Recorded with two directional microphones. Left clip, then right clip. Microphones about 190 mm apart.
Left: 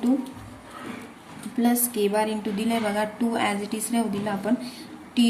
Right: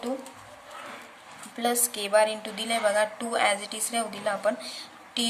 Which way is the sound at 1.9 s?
20° right (ahead or behind).